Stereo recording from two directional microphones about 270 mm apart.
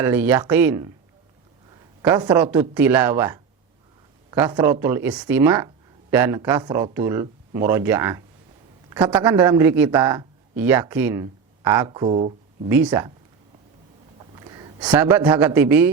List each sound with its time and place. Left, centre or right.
0.0 s speech: centre
2.0 s a man's voice: centre
12.6 s speech: centre
14.2 s a sound: centre
14.8 s speech: centre